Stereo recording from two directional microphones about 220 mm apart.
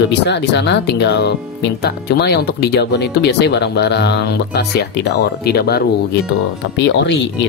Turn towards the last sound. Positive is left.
turn(degrees=55)  # may be behind; listen again after turning